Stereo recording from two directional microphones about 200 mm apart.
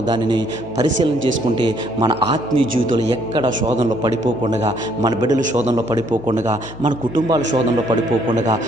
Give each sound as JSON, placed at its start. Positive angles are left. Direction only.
{"t": 0.1, "sound": "a man's voice", "side_deg": -20}
{"t": 5.4, "sound": "a man's voice", "side_deg": -35}